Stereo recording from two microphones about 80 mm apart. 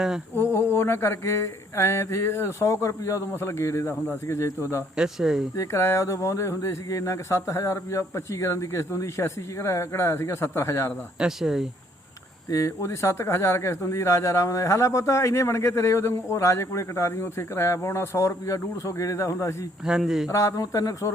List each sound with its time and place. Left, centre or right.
0.3 s speech: left
4.9 s speech: centre
5.5 s speech: left
11.2 s speech: centre
12.5 s speech: left
19.8 s speech: centre
20.2 s speech: left